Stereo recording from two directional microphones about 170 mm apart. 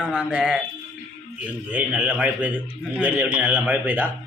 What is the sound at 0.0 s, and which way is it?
Speech, 5° right (ahead or behind).